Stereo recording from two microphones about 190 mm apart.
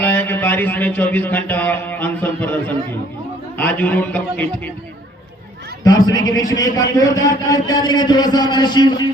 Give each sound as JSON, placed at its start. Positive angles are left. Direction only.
{"t": 0.0, "sound": "a sound", "side_deg": 10}
{"t": 3.6, "sound": "a man's voice", "side_deg": 10}
{"t": 5.8, "sound": "a man's voice", "side_deg": 20}